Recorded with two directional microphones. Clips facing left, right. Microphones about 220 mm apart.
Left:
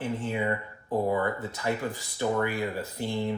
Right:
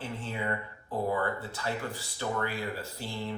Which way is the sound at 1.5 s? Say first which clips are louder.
Left 5 dB; 15° left (ahead or behind).